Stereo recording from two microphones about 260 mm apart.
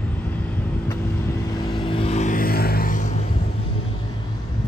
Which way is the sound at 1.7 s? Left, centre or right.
Left.